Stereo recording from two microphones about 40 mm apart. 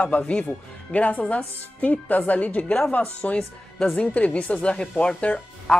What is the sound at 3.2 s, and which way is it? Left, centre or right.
A woman's voice, left.